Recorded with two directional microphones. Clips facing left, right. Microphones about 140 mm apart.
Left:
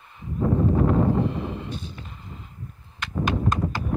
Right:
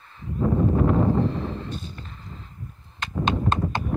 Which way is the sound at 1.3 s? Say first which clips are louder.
Even; 10° left (ahead or behind).